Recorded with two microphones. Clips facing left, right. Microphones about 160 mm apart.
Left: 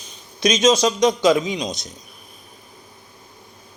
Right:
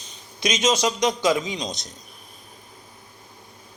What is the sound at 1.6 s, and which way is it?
Speech, 5° left (ahead or behind).